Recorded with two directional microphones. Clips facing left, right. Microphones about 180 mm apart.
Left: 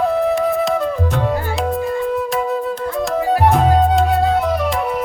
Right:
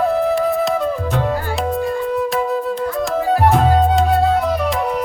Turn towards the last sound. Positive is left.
turn(degrees=0)  # may be behind; listen again after turning